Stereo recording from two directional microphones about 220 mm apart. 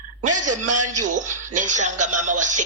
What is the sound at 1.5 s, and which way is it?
Speech, 35° right (ahead or behind).